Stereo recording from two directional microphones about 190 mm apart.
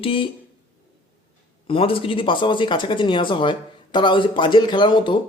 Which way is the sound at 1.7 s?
30° left (ahead or behind).